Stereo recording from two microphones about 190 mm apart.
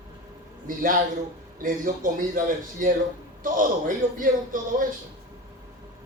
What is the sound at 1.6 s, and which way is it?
Speech, 45° right (ahead or behind).